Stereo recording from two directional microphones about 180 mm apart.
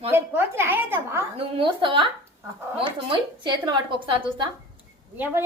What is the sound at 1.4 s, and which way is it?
A woman's voice, 30° right (ahead or behind).